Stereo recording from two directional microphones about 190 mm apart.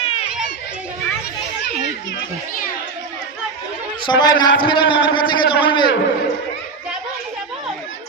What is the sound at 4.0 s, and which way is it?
A man's voice, 25° left (ahead or behind).